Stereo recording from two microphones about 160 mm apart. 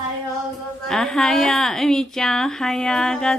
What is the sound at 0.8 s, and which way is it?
A woman's voice, 5° left (ahead or behind).